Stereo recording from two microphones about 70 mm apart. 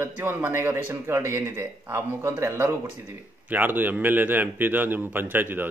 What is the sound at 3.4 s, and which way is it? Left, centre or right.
Speech, right.